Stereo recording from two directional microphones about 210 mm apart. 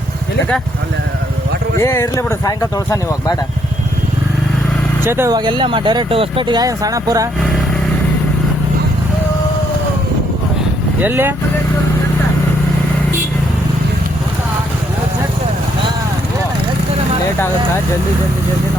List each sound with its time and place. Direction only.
1.8 s speech: 15° left (ahead or behind)
5.0 s speech: 10° right (ahead or behind)
11.0 s speech: 10° right (ahead or behind)